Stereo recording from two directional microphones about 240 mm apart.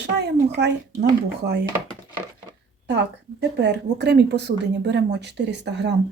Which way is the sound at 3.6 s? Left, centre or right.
Right.